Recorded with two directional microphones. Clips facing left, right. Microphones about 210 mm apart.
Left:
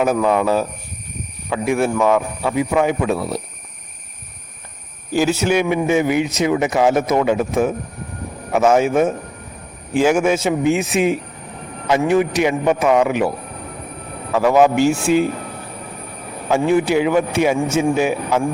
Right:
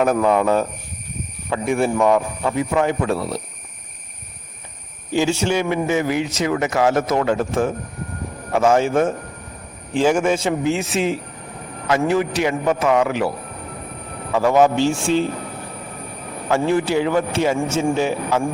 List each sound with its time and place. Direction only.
0.0 s speech: 5° left (ahead or behind)
5.1 s speech: 5° left (ahead or behind)
14.3 s speech: 5° left (ahead or behind)
16.5 s speech: 15° left (ahead or behind)